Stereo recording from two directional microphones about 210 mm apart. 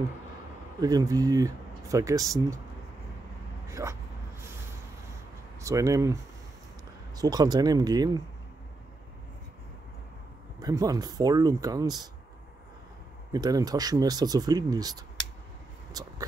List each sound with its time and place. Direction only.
0.7 s speech: 20° right (ahead or behind)
3.6 s speech: 15° right (ahead or behind)
5.6 s speech: 15° right (ahead or behind)
7.2 s speech: 20° right (ahead or behind)
10.6 s speech: 15° right (ahead or behind)
13.3 s speech: 15° right (ahead or behind)
15.9 s vehicle: 15° right (ahead or behind)